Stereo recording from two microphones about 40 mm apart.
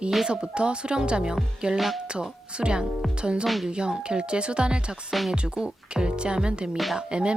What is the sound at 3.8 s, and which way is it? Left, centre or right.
Speech, right.